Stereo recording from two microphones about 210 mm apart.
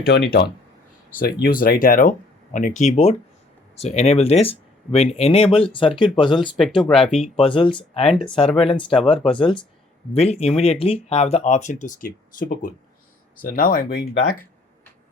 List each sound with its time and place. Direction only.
0.0 s speech: 50° left (ahead or behind); by 6.6 s 25° left (ahead or behind)
6.6 s speech: centre (ahead or behind)
7.3 s speech: 25° left (ahead or behind); by 14.4 s 45° left (ahead or behind)